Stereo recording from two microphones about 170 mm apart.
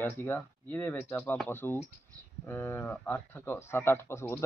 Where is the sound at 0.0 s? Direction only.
10° left (ahead or behind).